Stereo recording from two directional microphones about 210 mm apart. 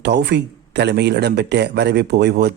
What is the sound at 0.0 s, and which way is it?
Speech, 55° right (ahead or behind).